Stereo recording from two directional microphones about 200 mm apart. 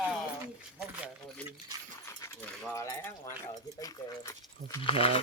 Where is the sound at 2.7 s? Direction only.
15° left (ahead or behind).